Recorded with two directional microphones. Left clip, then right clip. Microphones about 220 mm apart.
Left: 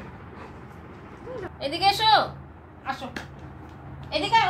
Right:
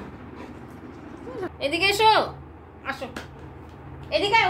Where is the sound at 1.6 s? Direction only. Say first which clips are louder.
Right 2 dB; 20° right (ahead or behind).